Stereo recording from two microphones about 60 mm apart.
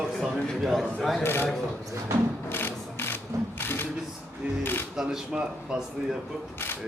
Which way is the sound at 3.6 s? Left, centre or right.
Left.